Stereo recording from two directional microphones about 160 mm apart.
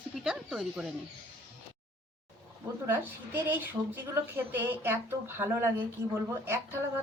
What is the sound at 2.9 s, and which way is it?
Speech, 10° right (ahead or behind).